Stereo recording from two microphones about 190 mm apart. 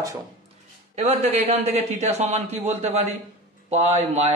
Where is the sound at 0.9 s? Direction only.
35° right (ahead or behind).